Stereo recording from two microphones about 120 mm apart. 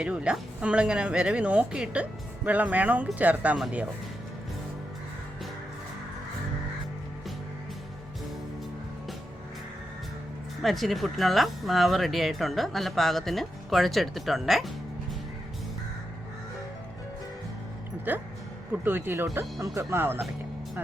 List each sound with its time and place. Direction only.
0.0 s speech: 10° right (ahead or behind)
10.6 s speech: centre (ahead or behind)
18.1 s speech: 15° right (ahead or behind)